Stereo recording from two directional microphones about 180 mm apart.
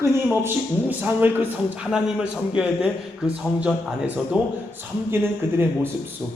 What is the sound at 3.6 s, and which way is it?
Speech, 10° right (ahead or behind).